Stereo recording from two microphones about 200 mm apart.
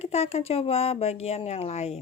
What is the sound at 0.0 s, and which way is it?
Speech, 30° left (ahead or behind).